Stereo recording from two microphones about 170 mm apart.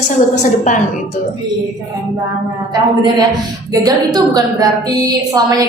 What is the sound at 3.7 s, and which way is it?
A woman's voice, 20° right (ahead or behind).